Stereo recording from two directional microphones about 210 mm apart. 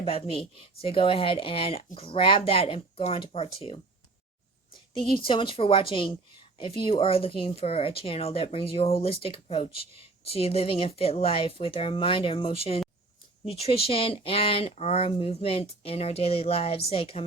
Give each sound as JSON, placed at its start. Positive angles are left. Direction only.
{"t": 0.0, "sound": "speech", "side_deg": 25}